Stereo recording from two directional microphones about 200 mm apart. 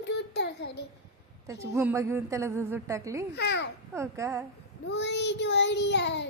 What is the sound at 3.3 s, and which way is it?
Child singing, 60° left (ahead or behind).